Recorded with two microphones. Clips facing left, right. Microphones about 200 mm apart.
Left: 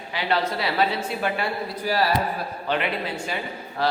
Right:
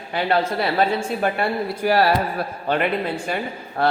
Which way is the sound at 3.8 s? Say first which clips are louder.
Right 4 dB; 55° right (ahead or behind).